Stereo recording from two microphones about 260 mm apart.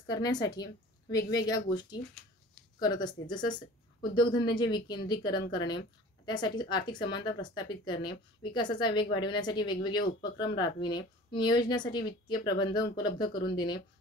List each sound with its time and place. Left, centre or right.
0.0 s a woman's voice: centre